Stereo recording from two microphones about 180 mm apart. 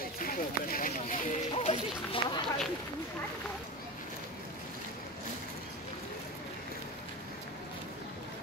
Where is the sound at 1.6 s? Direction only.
30° left (ahead or behind).